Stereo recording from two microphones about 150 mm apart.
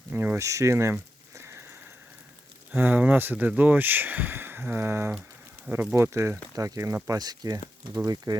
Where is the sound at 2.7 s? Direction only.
10° right (ahead or behind).